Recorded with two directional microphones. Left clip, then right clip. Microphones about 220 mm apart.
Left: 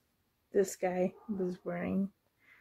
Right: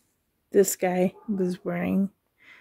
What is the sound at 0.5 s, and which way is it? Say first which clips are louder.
A woman's voice: right 9 dB; 45° right (ahead or behind).